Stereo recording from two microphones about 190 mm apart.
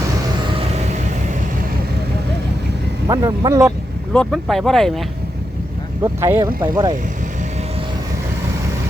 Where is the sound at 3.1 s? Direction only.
20° right (ahead or behind).